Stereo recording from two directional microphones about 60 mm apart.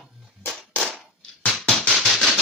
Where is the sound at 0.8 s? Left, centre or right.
Centre.